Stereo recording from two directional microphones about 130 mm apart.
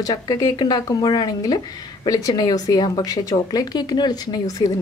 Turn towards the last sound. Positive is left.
turn(degrees=30)  # may be behind; listen again after turning